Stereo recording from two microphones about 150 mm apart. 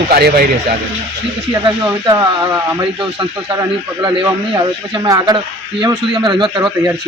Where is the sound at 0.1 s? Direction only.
80° right.